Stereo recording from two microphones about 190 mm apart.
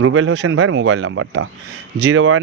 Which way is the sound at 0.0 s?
90° right.